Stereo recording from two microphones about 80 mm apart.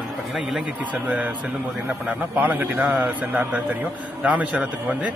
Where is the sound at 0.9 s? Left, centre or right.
Centre.